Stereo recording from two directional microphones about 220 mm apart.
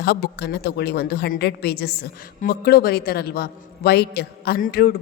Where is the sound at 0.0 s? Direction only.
50° left (ahead or behind).